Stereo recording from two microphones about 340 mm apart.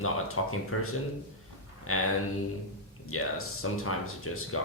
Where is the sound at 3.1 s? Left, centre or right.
Left.